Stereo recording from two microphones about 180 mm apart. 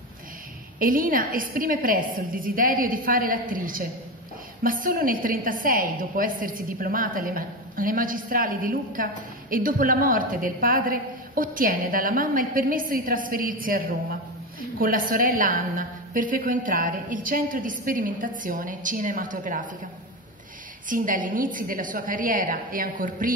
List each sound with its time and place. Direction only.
0.7 s a woman's voice: 50° right (ahead or behind)
20.9 s a woman's voice: 50° right (ahead or behind)